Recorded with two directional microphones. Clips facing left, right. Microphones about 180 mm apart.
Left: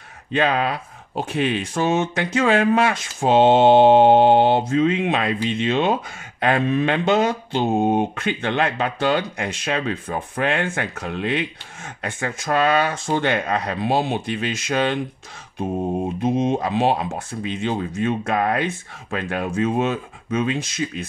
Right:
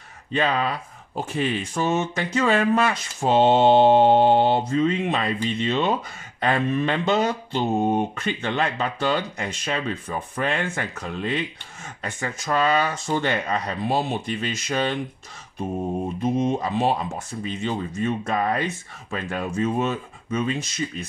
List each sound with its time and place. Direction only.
0.4 s speech: 65° left (ahead or behind); by 5.9 s 80° left
6.4 s mantra: 75° left (ahead or behind); by 7.8 s 90° left
8.2 s speech: 65° left (ahead or behind)
15.8 s mantra: 45° left (ahead or behind)
16.3 s speech: 85° left; by 21.0 s 65° left (ahead or behind)